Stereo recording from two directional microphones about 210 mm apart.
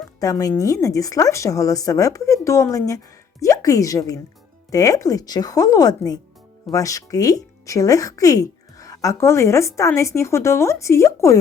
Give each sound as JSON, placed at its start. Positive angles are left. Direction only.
{"t": 0.2, "sound": "speech", "side_deg": 15}